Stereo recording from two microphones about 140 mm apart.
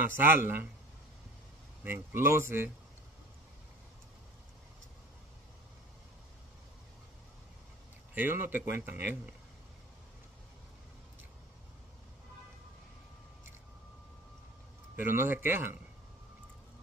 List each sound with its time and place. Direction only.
0.1 s a man's voice: 15° right (ahead or behind)
1.8 s a man's voice: 15° right (ahead or behind)
8.1 s a man's voice: 15° right (ahead or behind)
15.0 s a man's voice: 15° right (ahead or behind)